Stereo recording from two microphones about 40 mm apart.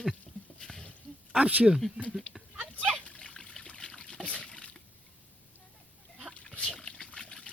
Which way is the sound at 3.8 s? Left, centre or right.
Left.